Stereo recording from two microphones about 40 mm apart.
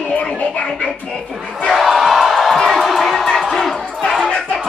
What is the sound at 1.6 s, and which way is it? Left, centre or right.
Crowd, centre.